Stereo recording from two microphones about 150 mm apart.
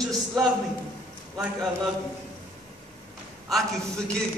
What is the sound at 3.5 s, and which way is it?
Speech, centre (ahead or behind).